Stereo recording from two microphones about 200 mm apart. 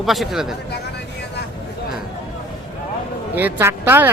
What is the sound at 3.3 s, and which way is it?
Speech, 10° right (ahead or behind).